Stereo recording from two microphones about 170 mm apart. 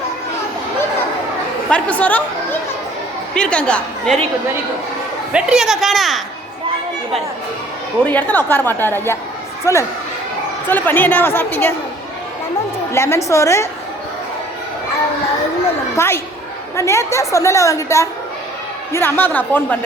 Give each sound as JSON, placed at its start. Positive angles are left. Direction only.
{"t": 1.7, "sound": "speech", "side_deg": 10}
{"t": 5.3, "sound": "speech", "side_deg": -5}
{"t": 8.0, "sound": "a woman's voice", "side_deg": 10}
{"t": 12.9, "sound": "a woman's voice", "side_deg": 15}
{"t": 16.0, "sound": "a woman's voice", "side_deg": 15}